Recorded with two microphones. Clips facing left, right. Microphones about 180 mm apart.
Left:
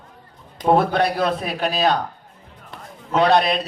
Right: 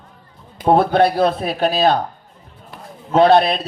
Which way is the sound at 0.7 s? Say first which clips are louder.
Right 4 dB; 30° right (ahead or behind).